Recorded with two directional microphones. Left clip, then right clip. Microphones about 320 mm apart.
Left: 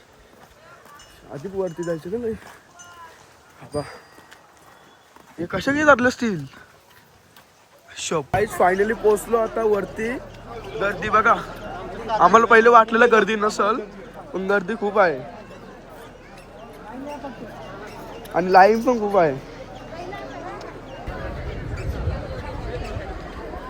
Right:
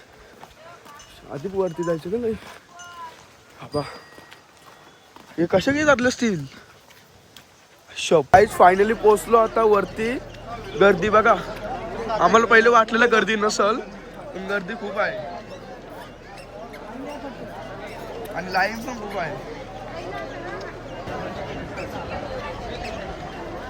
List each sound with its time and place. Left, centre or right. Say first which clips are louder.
1.3 s a man's voice: right 2 dB; centre
3.6 s a man's voice: right 2 dB; centre
5.5 s a man's voice: left 2 dB; centre
7.9 s a sound: right 7 dB; centre
8.4 s a man's voice: right 4 dB; centre
10.8 s a man's voice: right 8 dB; centre
11.1 s a man's voice: even; centre
18.3 s speech: left 10 dB; centre